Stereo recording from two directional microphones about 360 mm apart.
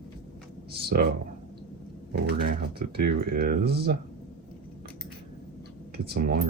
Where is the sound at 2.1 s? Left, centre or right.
Right.